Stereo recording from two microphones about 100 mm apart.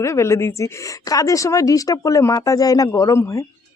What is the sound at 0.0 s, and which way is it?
A woman's voice, 30° left (ahead or behind).